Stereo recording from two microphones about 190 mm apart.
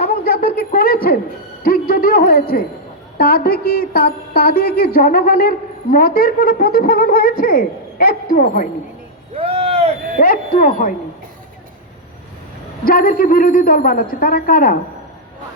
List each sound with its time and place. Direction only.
0.0 s a sound: 50° left (ahead or behind)
3.2 s a woman's voice: 50° left (ahead or behind)
9.3 s vehicle: 30° right (ahead or behind)
10.2 s a woman's voice: 45° left (ahead or behind)
12.8 s a woman's voice: 50° left (ahead or behind)